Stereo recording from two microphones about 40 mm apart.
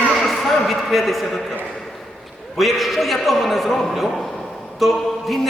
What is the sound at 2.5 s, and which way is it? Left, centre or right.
A man's voice, centre.